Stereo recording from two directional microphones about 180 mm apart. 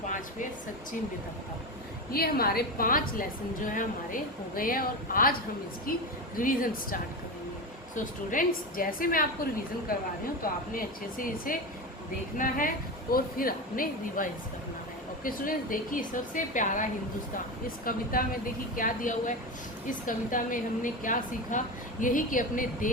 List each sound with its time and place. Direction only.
2.1 s a woman's voice: 55° left (ahead or behind)
17.8 s a woman's voice: 55° left (ahead or behind)